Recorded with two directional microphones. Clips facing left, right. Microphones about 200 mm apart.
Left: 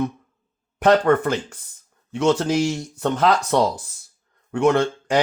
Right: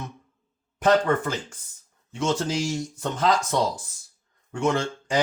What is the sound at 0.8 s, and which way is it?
Speech, 60° left (ahead or behind).